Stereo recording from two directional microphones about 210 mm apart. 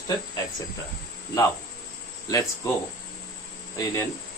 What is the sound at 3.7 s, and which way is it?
Speech, 15° left (ahead or behind).